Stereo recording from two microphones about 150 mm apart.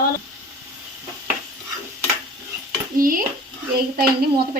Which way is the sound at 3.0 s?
70° right (ahead or behind).